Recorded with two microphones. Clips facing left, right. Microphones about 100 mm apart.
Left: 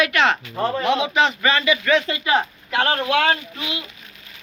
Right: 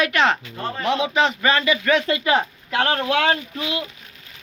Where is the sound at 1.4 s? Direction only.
30° right (ahead or behind).